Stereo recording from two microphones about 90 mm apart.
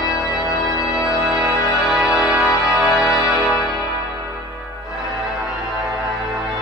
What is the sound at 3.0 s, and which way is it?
Music, 35° left (ahead or behind).